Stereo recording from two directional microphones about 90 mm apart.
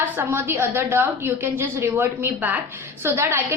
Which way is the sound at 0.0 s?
25° right (ahead or behind).